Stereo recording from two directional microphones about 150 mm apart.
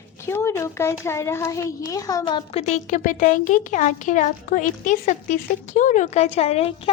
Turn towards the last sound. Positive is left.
turn(degrees=40)  # may be behind; listen again after turning